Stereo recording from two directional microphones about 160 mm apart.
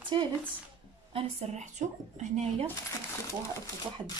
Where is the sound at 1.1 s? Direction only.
45° right (ahead or behind).